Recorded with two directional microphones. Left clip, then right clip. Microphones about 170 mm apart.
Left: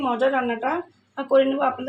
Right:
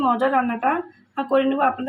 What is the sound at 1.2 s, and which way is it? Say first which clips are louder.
Speech: left 1 dB; 25° right (ahead or behind).